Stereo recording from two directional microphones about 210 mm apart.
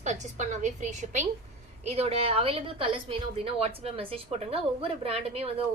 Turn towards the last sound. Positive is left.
turn(degrees=-25)  # may be behind; listen again after turning